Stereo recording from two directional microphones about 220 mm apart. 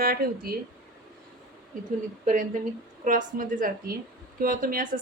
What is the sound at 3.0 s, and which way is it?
A woman's voice, 35° right (ahead or behind).